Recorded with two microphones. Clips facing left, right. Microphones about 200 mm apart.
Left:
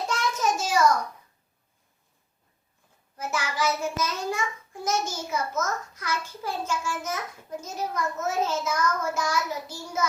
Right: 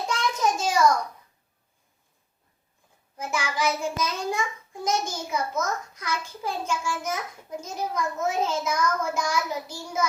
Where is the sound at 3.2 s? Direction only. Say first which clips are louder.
Right 1 dB; 15° right (ahead or behind).